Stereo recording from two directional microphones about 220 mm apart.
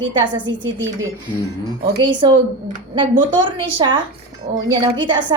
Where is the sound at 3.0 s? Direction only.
20° right (ahead or behind).